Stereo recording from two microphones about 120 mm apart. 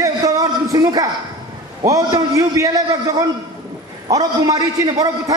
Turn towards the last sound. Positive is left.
turn(degrees=-30)  # may be behind; listen again after turning